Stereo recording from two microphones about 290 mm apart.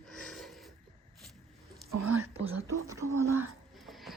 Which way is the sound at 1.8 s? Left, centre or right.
Right.